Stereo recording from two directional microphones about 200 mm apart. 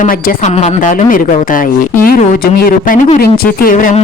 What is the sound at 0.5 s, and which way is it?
Speech, 35° left (ahead or behind).